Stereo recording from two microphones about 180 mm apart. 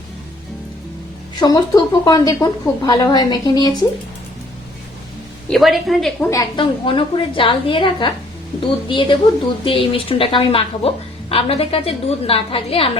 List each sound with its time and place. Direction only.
1.4 s speech: 20° left (ahead or behind)
5.5 s a woman's voice: centre (ahead or behind)
6.3 s a woman's voice: 25° left (ahead or behind)